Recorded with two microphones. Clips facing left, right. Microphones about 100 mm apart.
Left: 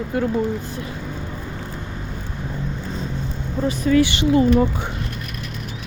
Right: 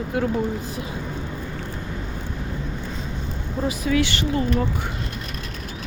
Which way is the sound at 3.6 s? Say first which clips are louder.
Left 5 dB; 5° right (ahead or behind).